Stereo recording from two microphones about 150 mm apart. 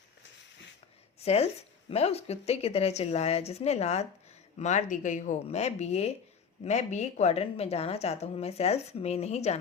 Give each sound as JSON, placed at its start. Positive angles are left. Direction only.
{"t": 1.2, "sound": "a woman's voice", "side_deg": 45}